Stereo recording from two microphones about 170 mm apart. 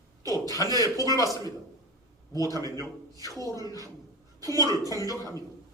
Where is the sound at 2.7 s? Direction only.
20° left (ahead or behind).